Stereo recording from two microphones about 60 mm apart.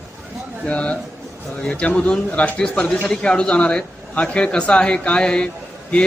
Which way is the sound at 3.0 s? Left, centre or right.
Centre.